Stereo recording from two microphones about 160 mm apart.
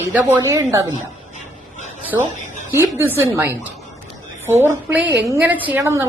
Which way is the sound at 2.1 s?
20° right (ahead or behind).